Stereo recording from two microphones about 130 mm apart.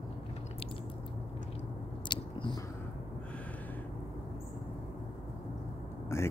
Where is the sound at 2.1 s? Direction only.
35° left (ahead or behind).